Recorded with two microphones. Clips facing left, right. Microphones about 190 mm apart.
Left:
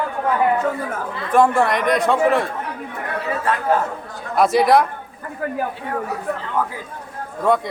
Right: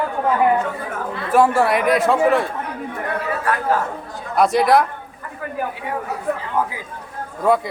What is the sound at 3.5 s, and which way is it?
Speech, 25° left (ahead or behind).